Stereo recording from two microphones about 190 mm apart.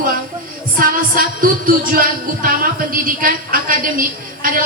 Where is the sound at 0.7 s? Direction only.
45° right (ahead or behind).